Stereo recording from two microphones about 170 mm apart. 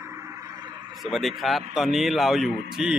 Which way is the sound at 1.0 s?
Centre (ahead or behind).